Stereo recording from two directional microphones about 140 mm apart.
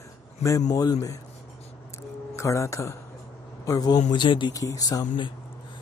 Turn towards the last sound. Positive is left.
turn(degrees=30)  # may be behind; listen again after turning